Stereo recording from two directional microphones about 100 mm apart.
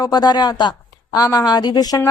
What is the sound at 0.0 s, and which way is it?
A woman's voice, 45° left (ahead or behind).